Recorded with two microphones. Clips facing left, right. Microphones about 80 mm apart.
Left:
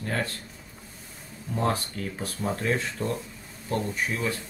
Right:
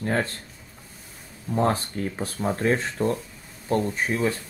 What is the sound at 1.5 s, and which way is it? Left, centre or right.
Speech, right.